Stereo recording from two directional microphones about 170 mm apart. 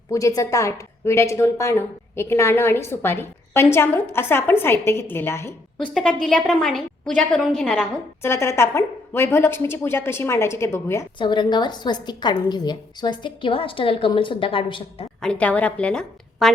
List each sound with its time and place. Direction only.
0.1 s a woman's voice: 20° left (ahead or behind)
11.2 s a woman's voice: 25° left (ahead or behind)
15.2 s a woman's voice: 5° left (ahead or behind)